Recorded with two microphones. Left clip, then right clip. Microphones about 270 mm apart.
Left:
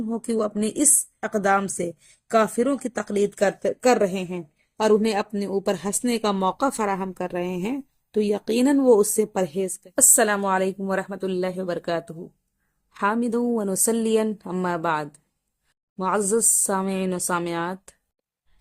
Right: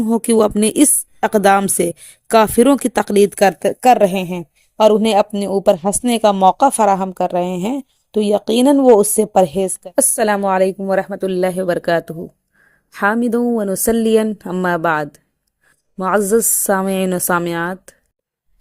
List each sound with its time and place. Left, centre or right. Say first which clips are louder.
0.1 s a woman's voice: right 12 dB; right